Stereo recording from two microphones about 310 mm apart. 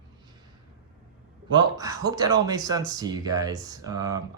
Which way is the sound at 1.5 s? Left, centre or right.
Centre.